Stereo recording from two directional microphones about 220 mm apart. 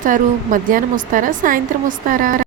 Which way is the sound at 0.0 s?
40° right (ahead or behind).